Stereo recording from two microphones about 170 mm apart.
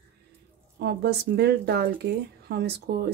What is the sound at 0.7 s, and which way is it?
Speech, 80° right.